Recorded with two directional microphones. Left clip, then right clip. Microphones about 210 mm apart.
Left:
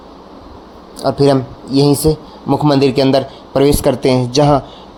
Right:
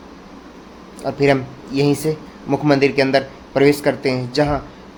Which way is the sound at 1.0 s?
30° left (ahead or behind).